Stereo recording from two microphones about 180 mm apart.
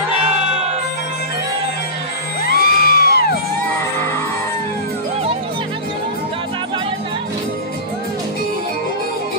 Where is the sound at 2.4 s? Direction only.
55° left (ahead or behind).